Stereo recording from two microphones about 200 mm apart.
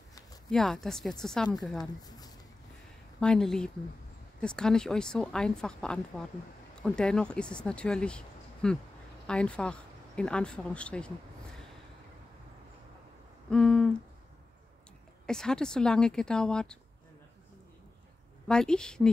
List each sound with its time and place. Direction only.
0.5 s a woman's voice: centre (ahead or behind)
2.0 s a sound: 20° left (ahead or behind)
3.2 s a woman's voice: 5° left (ahead or behind)
13.5 s a sound: 5° left (ahead or behind)
15.2 s a woman's voice: 5° left (ahead or behind)
18.5 s a woman's voice: 5° left (ahead or behind)